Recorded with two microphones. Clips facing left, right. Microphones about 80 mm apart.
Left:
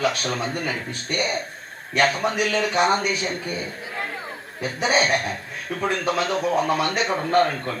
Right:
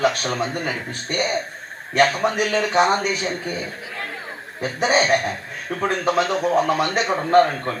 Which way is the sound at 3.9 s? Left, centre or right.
Centre.